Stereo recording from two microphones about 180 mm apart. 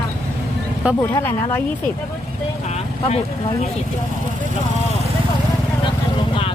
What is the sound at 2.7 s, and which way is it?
Speech, 35° left (ahead or behind).